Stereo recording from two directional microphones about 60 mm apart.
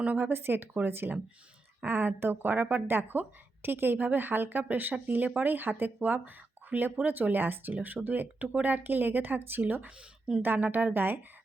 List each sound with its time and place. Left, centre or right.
0.0 s speech: right
0.3 s speech: right